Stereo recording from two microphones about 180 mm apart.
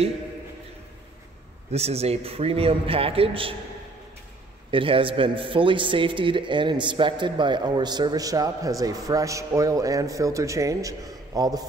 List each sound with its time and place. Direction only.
1.7 s a man's voice: 35° right (ahead or behind)
4.6 s a man's voice: 30° right (ahead or behind)